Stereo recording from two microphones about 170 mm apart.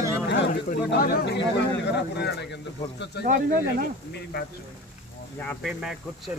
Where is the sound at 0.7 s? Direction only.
60° left (ahead or behind).